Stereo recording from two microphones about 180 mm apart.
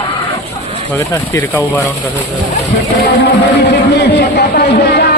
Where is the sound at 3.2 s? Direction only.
65° left (ahead or behind).